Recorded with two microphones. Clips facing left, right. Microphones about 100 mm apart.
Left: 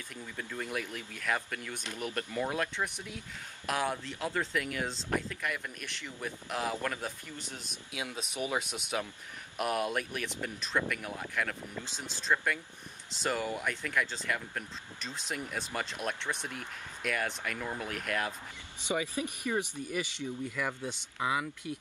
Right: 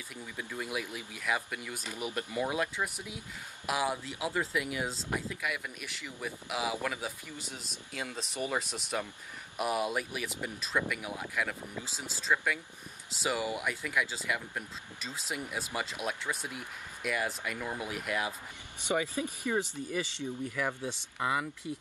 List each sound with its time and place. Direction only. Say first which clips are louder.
0.1 s speech: even; 10° right (ahead or behind)
18.9 s speech: right 1 dB; 15° left (ahead or behind)
20.2 s speech: even; 10° right (ahead or behind)
21.2 s speech: even; 5° left (ahead or behind)